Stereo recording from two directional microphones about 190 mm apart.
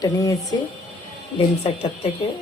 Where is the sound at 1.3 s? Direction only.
30° left (ahead or behind).